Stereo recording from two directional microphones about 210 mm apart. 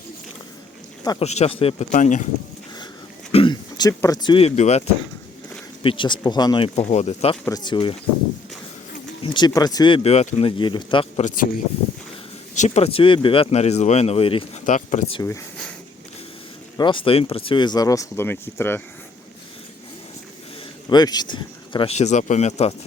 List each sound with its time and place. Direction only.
1.2 s speech: 30° left (ahead or behind)
3.3 s speech: 20° left (ahead or behind)
5.8 s speech: 25° left (ahead or behind)
7.4 s speech: 20° left (ahead or behind)
9.2 s speech: 20° left (ahead or behind)
11.2 s speech: 35° left (ahead or behind)
12.5 s speech: 30° left (ahead or behind)
14.7 s speech: 35° left (ahead or behind)
15.1 s speech: 15° left (ahead or behind)
16.7 s speech: 25° left (ahead or behind)
20.9 s speech: 20° left (ahead or behind)